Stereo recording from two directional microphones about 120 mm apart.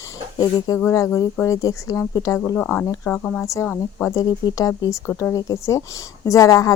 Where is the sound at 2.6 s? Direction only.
15° left (ahead or behind).